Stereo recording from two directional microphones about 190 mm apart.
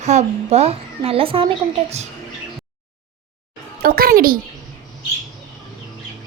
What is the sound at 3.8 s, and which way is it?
Speech, 50° right (ahead or behind).